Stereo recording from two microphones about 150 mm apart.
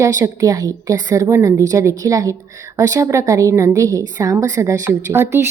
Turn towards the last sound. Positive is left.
turn(degrees=-15)  # may be behind; listen again after turning